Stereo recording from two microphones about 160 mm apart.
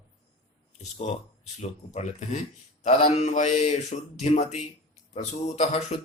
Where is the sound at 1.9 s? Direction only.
45° left (ahead or behind).